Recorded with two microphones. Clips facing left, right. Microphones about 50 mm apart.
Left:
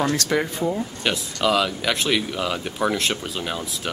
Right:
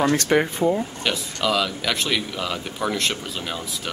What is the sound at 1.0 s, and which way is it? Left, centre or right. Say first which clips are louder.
Speech: left 4 dB; centre.